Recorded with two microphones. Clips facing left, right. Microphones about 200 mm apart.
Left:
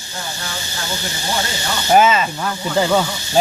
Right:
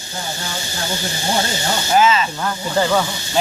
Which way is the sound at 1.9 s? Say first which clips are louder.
Left 2 dB; 55° left (ahead or behind).